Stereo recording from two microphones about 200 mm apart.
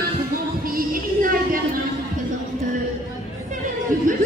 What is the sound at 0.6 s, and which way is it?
Music, 45° right (ahead or behind).